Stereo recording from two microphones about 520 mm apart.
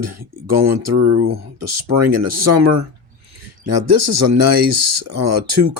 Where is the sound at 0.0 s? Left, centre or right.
Right.